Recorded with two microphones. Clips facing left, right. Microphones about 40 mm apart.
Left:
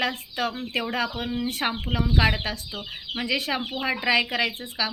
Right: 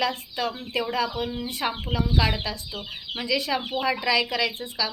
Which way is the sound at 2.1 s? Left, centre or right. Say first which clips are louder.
Left 4 dB; left.